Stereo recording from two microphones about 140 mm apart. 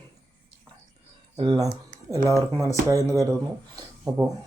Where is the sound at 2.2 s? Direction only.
20° right (ahead or behind).